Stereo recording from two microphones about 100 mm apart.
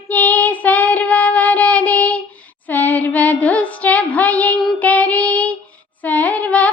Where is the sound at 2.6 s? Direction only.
15° left (ahead or behind).